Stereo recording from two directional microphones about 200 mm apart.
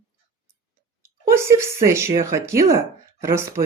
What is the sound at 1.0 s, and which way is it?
Speech, 15° right (ahead or behind).